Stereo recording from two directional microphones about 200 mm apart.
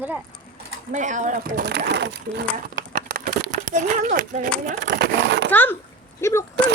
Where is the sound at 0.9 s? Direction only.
40° right (ahead or behind); by 2.5 s 60° right (ahead or behind).